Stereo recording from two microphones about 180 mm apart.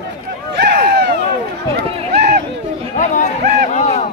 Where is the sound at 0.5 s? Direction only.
65° right (ahead or behind).